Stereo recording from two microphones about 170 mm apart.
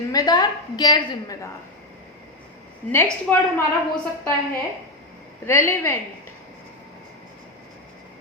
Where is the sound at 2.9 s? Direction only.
15° left (ahead or behind).